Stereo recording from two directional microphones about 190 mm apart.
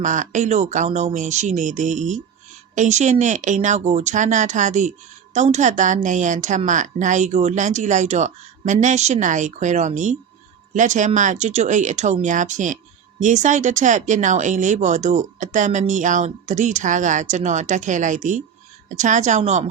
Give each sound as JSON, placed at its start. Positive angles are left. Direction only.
{"t": 0.0, "sound": "speech", "side_deg": -40}